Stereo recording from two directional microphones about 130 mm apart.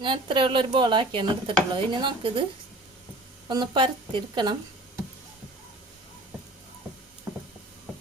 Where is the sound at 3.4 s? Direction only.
35° right (ahead or behind).